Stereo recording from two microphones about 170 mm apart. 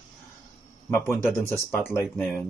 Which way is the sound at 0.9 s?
10° left (ahead or behind).